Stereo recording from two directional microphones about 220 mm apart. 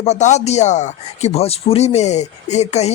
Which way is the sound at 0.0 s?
30° left (ahead or behind).